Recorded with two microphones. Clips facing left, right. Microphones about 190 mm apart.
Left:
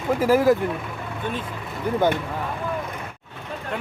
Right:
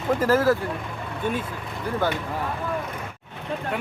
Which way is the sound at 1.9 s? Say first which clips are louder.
Left 4 dB; 20° left (ahead or behind).